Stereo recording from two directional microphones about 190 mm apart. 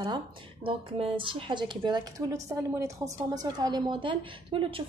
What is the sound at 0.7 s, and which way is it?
A woman's voice, 30° right (ahead or behind).